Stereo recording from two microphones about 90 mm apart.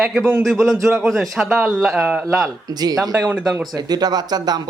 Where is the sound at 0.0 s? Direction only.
Centre (ahead or behind).